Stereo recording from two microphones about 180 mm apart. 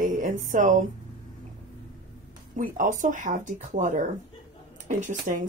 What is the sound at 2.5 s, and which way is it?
Speech, 45° right (ahead or behind).